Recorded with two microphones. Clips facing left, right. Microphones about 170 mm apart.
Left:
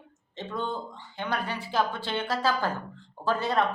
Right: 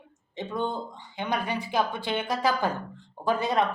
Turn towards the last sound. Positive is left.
turn(degrees=-15)  # may be behind; listen again after turning